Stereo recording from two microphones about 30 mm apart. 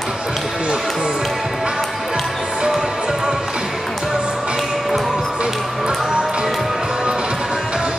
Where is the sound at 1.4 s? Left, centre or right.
Centre.